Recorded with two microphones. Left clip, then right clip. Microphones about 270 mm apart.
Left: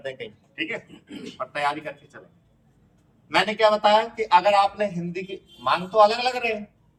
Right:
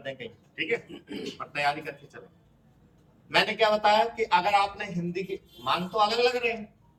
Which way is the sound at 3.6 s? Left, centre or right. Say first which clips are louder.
Left 5 dB; centre.